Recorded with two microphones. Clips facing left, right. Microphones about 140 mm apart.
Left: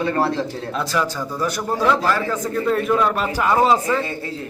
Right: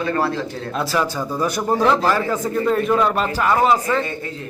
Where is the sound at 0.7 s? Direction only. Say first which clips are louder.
Right 2 dB; 10° right (ahead or behind).